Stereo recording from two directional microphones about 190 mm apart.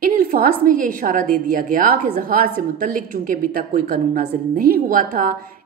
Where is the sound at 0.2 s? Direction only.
50° right (ahead or behind).